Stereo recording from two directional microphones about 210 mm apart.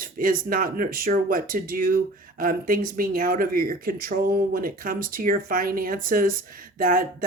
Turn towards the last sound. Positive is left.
turn(degrees=-40)  # may be behind; listen again after turning